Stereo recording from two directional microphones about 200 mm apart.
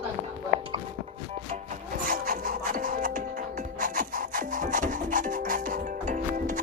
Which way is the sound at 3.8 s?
40° right (ahead or behind).